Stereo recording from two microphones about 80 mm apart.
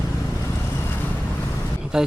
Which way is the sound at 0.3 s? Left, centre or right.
Left.